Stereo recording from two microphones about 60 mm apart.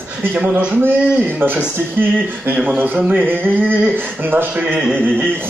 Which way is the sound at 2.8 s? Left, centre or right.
Right.